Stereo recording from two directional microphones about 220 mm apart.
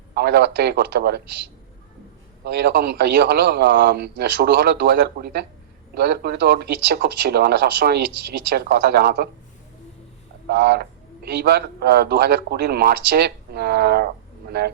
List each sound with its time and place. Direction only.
0.1 s a man's voice: 45° right (ahead or behind)
10.4 s a man's voice: 45° right (ahead or behind)